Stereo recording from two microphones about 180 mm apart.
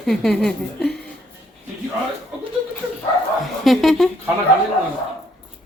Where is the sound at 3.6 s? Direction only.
Centre (ahead or behind).